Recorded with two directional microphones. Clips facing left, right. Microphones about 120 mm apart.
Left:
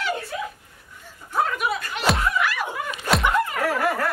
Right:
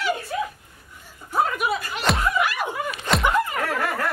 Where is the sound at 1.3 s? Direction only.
5° right (ahead or behind).